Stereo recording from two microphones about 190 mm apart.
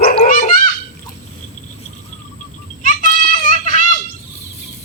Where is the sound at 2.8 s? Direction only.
45° left (ahead or behind).